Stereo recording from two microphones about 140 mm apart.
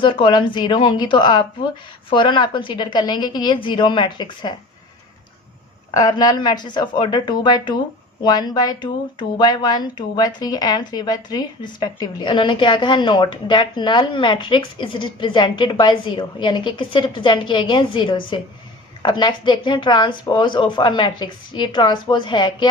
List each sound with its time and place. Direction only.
0.0 s speech: 35° left (ahead or behind)
5.9 s speech: 30° left (ahead or behind)